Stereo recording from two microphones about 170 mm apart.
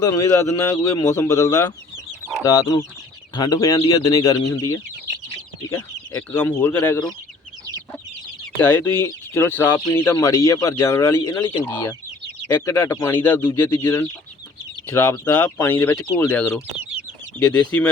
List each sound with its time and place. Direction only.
0.0 s speech: 15° left (ahead or behind)
5.7 s speech: 15° left (ahead or behind)
8.6 s speech: 15° left (ahead or behind)
17.7 s speech: 10° left (ahead or behind)